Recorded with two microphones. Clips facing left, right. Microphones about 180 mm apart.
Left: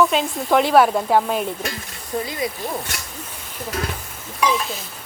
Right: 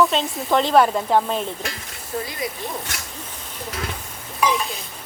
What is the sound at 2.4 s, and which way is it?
Speech, 25° left (ahead or behind).